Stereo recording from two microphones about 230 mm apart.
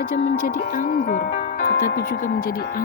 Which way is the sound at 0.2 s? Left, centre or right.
Left.